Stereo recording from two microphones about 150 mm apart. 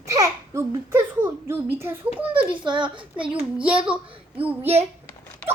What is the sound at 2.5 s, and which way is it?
Speech, 30° right (ahead or behind).